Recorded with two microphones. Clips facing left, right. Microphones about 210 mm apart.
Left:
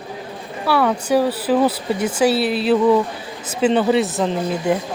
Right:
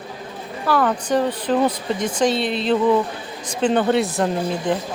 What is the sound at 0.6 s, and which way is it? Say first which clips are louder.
A man's voice: left 1 dB; 10° left (ahead or behind).